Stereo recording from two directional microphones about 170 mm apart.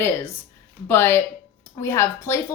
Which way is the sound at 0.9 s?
15° left (ahead or behind).